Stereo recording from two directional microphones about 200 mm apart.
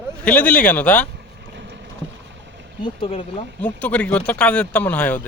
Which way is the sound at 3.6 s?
5° left (ahead or behind).